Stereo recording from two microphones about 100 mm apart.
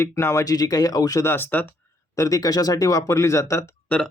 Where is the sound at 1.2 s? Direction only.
25° left (ahead or behind).